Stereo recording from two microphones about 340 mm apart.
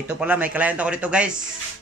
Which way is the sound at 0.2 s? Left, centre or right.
Centre.